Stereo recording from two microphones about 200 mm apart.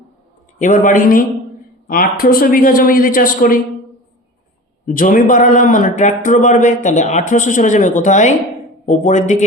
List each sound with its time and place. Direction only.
0.6 s a man's voice: 40° left (ahead or behind)
4.9 s speech: 45° left (ahead or behind)